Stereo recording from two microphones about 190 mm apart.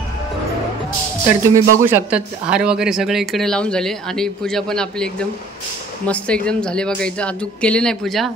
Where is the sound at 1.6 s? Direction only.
45° right (ahead or behind).